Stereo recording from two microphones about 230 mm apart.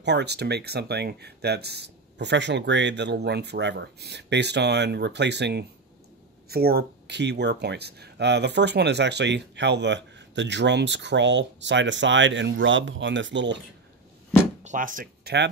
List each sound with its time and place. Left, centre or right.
0.0 s speech: right
14.6 s speech: right